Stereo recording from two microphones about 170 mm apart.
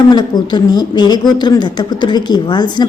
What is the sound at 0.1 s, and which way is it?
A woman's voice, 25° left (ahead or behind).